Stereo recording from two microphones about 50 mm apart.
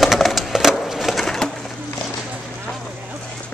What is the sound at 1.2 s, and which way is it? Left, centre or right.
Bird, centre.